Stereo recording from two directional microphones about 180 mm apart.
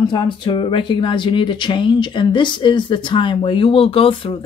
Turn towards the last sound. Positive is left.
turn(degrees=30)  # may be behind; listen again after turning